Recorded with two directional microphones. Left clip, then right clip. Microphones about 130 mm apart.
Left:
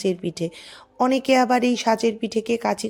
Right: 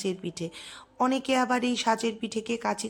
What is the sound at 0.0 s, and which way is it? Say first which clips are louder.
A woman's voice: left 8 dB; 30° left (ahead or behind).